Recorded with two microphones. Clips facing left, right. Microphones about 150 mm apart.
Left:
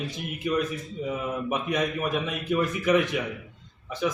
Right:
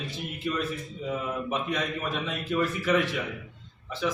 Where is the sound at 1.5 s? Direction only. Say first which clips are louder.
Left 4 dB; 15° left (ahead or behind).